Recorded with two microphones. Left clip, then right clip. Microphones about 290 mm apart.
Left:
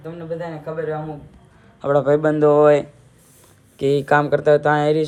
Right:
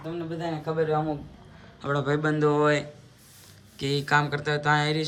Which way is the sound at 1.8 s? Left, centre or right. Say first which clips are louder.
Left 10 dB; centre.